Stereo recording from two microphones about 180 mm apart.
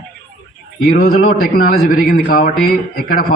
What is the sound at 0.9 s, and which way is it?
A man's voice, 55° left (ahead or behind).